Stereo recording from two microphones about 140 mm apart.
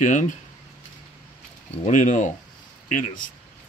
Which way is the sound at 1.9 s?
65° left (ahead or behind).